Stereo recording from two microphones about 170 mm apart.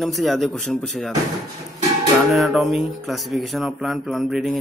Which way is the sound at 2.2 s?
Centre (ahead or behind).